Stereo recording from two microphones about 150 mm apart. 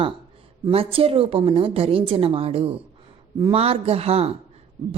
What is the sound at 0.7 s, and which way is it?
A woman's voice, 40° right (ahead or behind).